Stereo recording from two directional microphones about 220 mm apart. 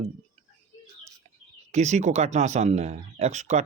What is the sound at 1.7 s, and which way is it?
Speech, 30° right (ahead or behind).